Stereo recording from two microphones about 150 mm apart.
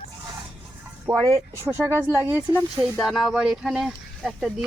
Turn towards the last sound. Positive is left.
turn(degrees=0)  # may be behind; listen again after turning